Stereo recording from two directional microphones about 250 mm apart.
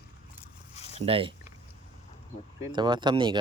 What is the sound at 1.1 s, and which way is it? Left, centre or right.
Speech, right.